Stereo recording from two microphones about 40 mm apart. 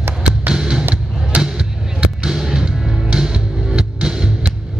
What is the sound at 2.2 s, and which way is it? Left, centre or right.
Music, centre.